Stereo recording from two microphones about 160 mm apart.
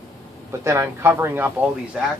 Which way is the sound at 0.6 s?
15° right (ahead or behind).